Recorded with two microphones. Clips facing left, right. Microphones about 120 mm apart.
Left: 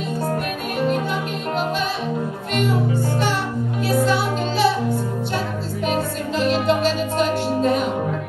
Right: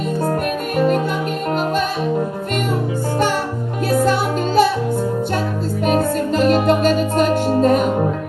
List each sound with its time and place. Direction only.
3.9 s music: 45° right (ahead or behind)
5.9 s music: 45° right (ahead or behind)